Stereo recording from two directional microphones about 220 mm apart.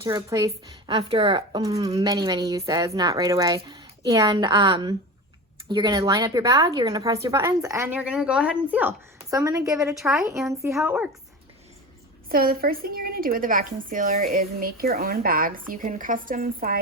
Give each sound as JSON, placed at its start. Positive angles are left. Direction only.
{"t": 0.0, "sound": "speech", "side_deg": -15}
{"t": 9.9, "sound": "speech", "side_deg": 0}
{"t": 10.5, "sound": "speech", "side_deg": -15}
{"t": 12.3, "sound": "speech", "side_deg": -40}